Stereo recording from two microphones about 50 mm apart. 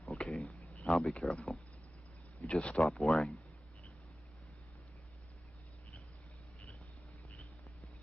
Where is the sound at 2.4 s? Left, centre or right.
Left.